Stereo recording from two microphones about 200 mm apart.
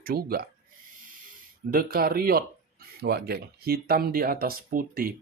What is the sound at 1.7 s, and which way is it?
Speech, 50° right (ahead or behind).